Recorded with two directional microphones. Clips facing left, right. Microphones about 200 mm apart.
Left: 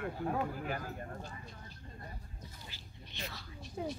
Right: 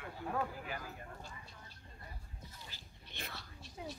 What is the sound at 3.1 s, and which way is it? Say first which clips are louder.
Whispering: left 3 dB; 55° right (ahead or behind).